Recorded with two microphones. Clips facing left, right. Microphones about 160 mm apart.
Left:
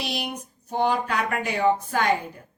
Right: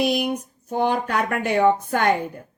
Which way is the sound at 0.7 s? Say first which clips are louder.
Right 2 dB; 50° right (ahead or behind).